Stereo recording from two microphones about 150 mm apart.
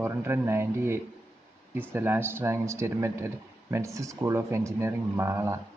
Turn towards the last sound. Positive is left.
turn(degrees=-20)  # may be behind; listen again after turning